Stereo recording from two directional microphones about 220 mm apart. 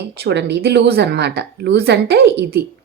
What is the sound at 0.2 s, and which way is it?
A woman's voice, 50° right (ahead or behind).